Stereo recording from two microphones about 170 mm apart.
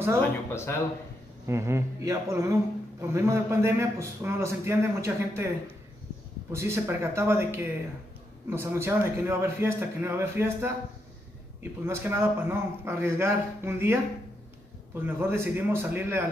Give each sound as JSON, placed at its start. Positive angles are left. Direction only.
{"t": 0.5, "sound": "speech", "side_deg": 15}
{"t": 1.4, "sound": "a man's voice", "side_deg": -15}
{"t": 6.5, "sound": "a man's voice", "side_deg": -15}
{"t": 11.8, "sound": "a man's voice", "side_deg": -15}
{"t": 15.0, "sound": "a man's voice", "side_deg": -10}